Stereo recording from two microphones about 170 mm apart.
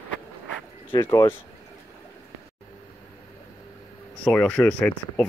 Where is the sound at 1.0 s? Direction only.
15° left (ahead or behind).